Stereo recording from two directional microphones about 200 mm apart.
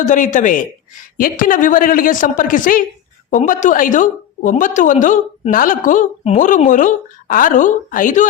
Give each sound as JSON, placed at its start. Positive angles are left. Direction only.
{"t": 0.0, "sound": "a woman's voice", "side_deg": 40}